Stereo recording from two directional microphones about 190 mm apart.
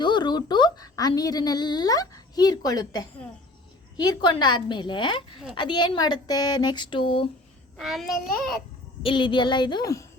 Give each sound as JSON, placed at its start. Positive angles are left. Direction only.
{"t": 0.0, "sound": "a woman's voice", "side_deg": 25}
{"t": 7.8, "sound": "a child's voice", "side_deg": 0}
{"t": 9.0, "sound": "speech", "side_deg": 25}